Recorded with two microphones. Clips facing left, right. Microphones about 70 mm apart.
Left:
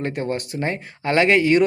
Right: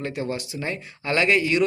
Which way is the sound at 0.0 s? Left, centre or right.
Left.